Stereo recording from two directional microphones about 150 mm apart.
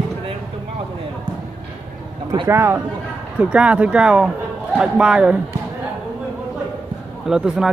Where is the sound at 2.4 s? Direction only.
15° right (ahead or behind).